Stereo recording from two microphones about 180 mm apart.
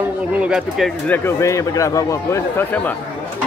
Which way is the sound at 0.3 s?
5° right (ahead or behind).